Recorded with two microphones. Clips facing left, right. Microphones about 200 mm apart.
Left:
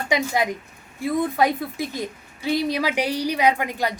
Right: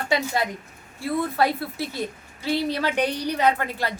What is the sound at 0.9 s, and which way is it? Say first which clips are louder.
A woman's voice: left 2 dB; 15° left (ahead or behind).